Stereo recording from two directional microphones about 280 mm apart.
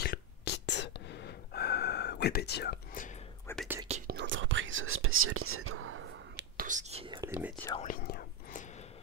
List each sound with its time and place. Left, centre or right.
0.0 s whispering: left
3.5 s whispering: centre
4.1 s whispering: right; by 7.5 s centre
7.8 s whispering: left